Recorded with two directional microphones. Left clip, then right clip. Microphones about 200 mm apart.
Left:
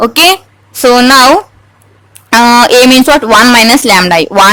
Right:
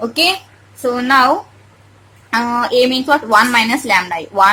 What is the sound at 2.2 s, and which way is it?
Speech, 50° left (ahead or behind).